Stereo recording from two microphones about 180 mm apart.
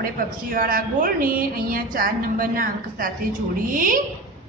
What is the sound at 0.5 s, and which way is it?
A woman's voice, 50° right (ahead or behind).